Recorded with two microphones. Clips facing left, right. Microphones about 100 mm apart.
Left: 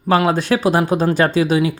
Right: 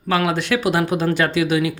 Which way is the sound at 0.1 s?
35° left (ahead or behind).